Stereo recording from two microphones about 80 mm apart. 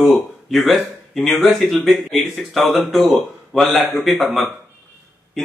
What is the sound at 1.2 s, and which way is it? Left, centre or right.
Speech, left.